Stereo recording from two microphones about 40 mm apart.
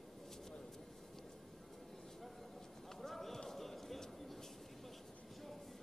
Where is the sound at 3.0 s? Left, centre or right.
Centre.